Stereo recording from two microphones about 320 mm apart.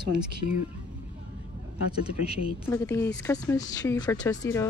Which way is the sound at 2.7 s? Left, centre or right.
Centre.